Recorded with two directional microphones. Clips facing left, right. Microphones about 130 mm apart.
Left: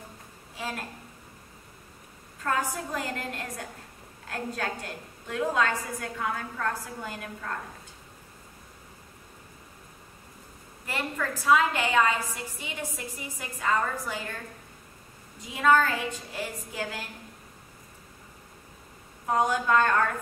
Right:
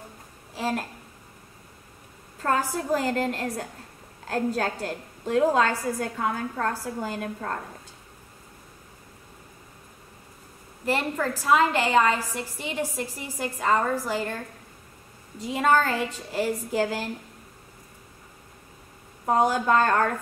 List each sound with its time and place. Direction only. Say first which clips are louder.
0.6 s a woman's voice: right 7 dB; 35° right (ahead or behind)
2.4 s a woman's voice: right 4 dB; 35° right (ahead or behind)
10.9 s a woman's voice: right 6 dB; 35° right (ahead or behind)
15.3 s a woman's voice: right 1 dB; 35° right (ahead or behind)
19.2 s a woman's voice: right 3 dB; 35° right (ahead or behind)